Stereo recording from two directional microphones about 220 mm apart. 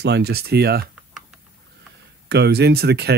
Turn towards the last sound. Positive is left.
turn(degrees=-50)  # may be behind; listen again after turning